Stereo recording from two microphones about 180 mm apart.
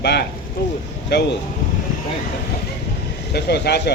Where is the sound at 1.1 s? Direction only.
70° left (ahead or behind).